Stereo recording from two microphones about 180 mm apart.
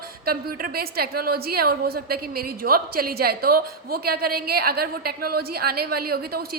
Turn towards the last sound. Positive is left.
turn(degrees=-60)  # may be behind; listen again after turning